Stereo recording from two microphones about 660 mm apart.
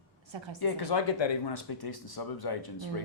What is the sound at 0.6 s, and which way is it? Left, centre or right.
Speech, left.